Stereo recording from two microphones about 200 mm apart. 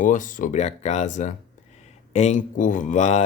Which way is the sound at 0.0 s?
40° left (ahead or behind).